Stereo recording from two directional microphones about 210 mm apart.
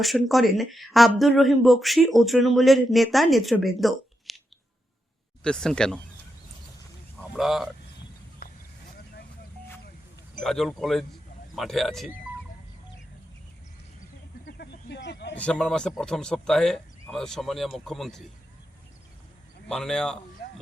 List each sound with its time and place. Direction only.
0.0 s speech: centre (ahead or behind)
5.4 s speech: 5° left (ahead or behind)
7.2 s speech: centre (ahead or behind)
10.4 s speech: centre (ahead or behind)
14.4 s a sound: 50° left (ahead or behind)
15.4 s speech: 5° left (ahead or behind)
19.6 s speech: 5° left (ahead or behind)